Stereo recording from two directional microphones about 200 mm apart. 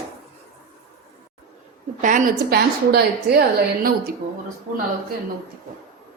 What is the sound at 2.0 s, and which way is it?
A woman's voice, 45° right (ahead or behind).